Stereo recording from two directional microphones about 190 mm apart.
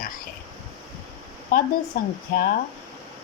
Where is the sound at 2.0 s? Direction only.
50° left (ahead or behind).